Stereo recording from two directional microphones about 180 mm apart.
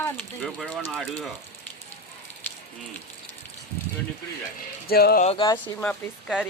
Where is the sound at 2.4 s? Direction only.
10° left (ahead or behind).